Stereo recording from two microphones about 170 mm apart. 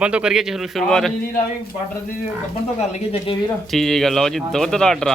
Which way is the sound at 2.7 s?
35° left (ahead or behind).